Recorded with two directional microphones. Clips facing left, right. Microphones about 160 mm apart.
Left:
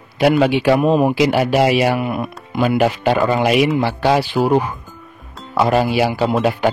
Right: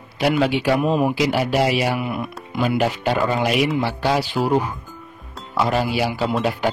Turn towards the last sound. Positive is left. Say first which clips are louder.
# left 5 dB
turn(degrees=60)  # may be behind; listen again after turning